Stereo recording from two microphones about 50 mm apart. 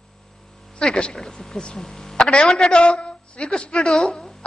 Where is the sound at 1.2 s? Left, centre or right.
Centre.